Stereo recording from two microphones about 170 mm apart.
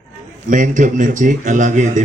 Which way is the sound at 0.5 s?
50° right (ahead or behind).